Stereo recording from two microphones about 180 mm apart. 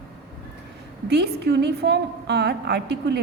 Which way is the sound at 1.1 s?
65° right (ahead or behind).